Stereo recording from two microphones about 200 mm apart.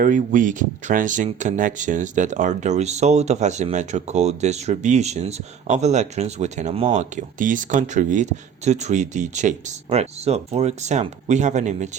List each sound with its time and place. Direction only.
0.0 s speech: 40° right (ahead or behind)